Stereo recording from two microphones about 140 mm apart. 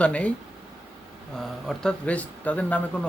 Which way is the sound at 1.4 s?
5° left (ahead or behind).